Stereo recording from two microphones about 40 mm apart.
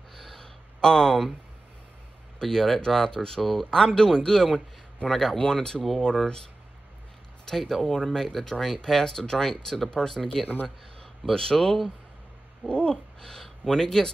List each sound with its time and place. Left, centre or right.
0.1 s a sound: centre
2.3 s speech: centre
7.4 s speech: centre
11.5 s speech: centre
12.6 s speech: left